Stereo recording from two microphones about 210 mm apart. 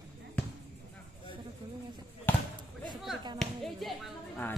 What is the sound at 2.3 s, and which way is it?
Basketball bounce, 10° left (ahead or behind).